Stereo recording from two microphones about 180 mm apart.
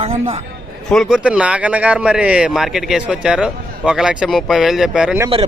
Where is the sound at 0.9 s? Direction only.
Centre (ahead or behind).